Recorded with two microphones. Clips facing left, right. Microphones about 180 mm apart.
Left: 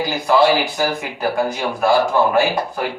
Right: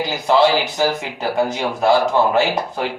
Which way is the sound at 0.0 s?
20° right (ahead or behind).